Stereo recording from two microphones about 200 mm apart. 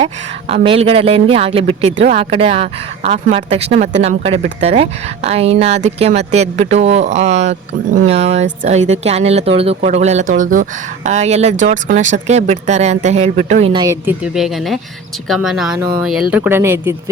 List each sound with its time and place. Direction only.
0.0 s speech: 30° right (ahead or behind)
13.8 s speech: 10° right (ahead or behind)